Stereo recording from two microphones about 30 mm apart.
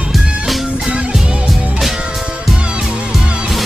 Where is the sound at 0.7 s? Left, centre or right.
Right.